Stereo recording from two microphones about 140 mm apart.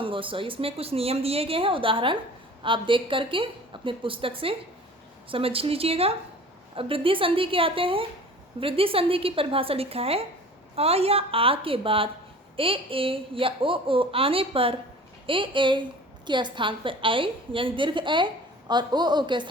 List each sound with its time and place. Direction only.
0.0 s a woman's voice: 40° right (ahead or behind)